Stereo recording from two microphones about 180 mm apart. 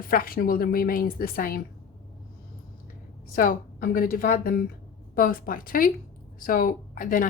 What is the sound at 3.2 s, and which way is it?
Speech, 50° left (ahead or behind).